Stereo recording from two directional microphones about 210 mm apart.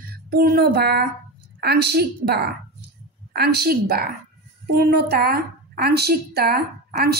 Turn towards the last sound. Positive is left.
turn(degrees=-50)  # may be behind; listen again after turning